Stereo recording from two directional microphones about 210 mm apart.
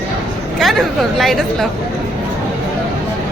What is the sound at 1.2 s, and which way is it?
Speech, centre (ahead or behind).